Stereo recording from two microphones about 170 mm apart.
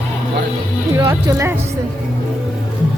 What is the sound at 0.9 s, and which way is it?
Speech, 20° right (ahead or behind).